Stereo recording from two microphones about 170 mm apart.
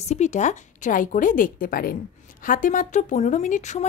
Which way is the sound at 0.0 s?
40° left (ahead or behind).